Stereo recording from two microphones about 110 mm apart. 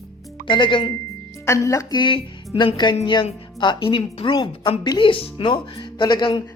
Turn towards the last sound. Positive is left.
turn(degrees=45)  # may be behind; listen again after turning